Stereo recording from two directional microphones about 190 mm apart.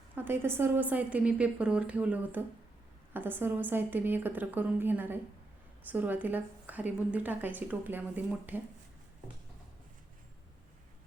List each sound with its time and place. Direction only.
0.2 s a woman's voice: 10° right (ahead or behind)